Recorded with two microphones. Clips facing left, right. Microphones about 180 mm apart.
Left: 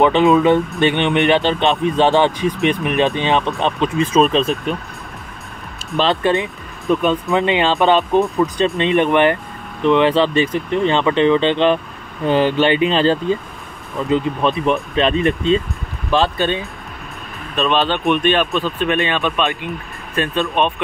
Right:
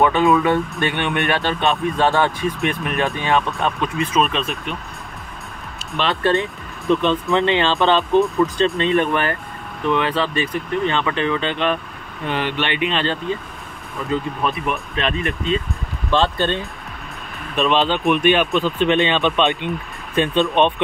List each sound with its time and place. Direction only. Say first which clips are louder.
0.0 s speech: left 3 dB; 20° left (ahead or behind)
6.2 s speech: left 1 dB; 15° left (ahead or behind)
6.9 s speech: left 1 dB; 5° left (ahead or behind); by 15.6 s 30° left (ahead or behind)
16.1 s speech: left 2 dB; 15° left (ahead or behind)
17.7 s speech: left 2 dB; 15° right (ahead or behind)
20.4 s speech: right 2 dB; 10° left (ahead or behind)